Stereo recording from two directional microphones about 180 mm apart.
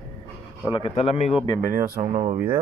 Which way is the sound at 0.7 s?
30° left (ahead or behind).